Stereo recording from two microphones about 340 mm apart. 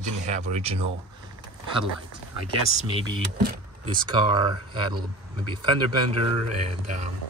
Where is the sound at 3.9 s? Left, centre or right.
Centre.